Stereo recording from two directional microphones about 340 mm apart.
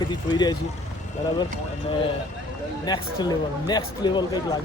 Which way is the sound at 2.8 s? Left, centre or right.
Centre.